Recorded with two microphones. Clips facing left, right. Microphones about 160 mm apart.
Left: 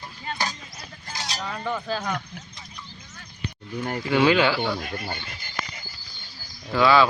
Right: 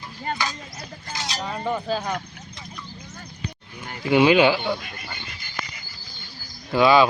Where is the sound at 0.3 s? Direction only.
50° right (ahead or behind).